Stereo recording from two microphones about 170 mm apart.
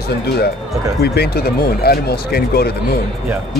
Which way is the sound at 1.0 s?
70° left (ahead or behind).